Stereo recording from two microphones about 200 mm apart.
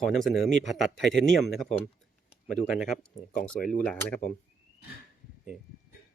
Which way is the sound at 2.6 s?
Centre (ahead or behind).